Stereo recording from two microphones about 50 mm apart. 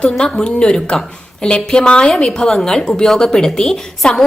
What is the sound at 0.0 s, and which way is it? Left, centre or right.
A woman's voice, centre.